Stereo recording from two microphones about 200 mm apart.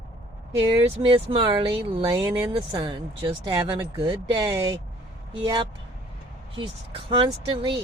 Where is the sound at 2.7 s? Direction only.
25° right (ahead or behind).